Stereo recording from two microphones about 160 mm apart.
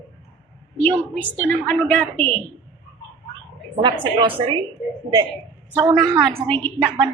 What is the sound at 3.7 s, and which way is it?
Speech, 30° right (ahead or behind).